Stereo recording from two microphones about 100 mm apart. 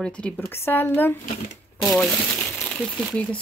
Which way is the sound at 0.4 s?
25° left (ahead or behind).